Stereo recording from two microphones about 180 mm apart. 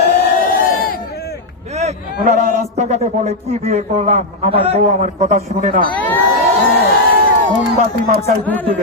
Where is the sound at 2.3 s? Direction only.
40° right (ahead or behind).